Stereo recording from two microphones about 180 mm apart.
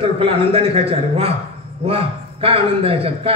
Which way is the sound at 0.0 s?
30° right (ahead or behind).